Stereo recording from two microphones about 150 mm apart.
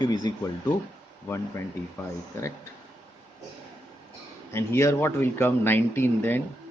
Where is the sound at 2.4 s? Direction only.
15° left (ahead or behind).